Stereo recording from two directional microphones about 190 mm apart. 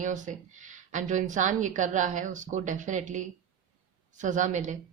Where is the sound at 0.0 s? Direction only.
40° right (ahead or behind).